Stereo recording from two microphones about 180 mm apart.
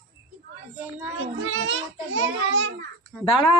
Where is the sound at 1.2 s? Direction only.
90° right.